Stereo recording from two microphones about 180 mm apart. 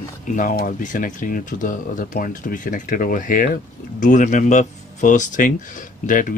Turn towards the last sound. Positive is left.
turn(degrees=45)  # may be behind; listen again after turning